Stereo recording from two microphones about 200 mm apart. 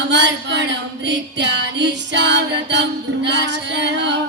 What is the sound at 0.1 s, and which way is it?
Music, 60° right (ahead or behind).